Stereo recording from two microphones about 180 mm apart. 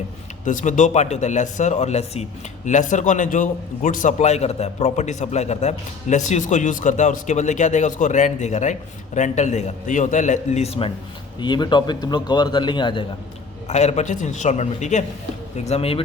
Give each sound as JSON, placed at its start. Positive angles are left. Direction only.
{"t": 0.4, "sound": "a man's voice", "side_deg": 45}
{"t": 13.7, "sound": "a man's voice", "side_deg": 40}